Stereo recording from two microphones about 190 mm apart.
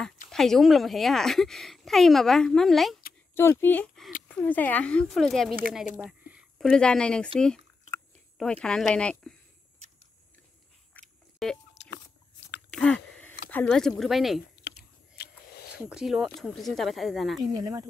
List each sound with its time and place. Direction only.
0.3 s speech: centre (ahead or behind)
3.3 s speech: 10° left (ahead or behind)
10.9 s chewing: 5° left (ahead or behind)
11.7 s a sound: 65° left (ahead or behind)
12.7 s a sound: 5° left (ahead or behind)
13.5 s speech: 5° left (ahead or behind)
15.1 s a sound: 55° left (ahead or behind)
15.9 s speech: centre (ahead or behind)
17.5 s speech: 20° right (ahead or behind)